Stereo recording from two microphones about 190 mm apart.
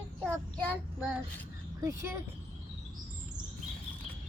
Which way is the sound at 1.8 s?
15° right (ahead or behind).